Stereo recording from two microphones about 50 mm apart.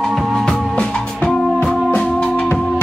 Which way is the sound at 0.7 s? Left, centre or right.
Centre.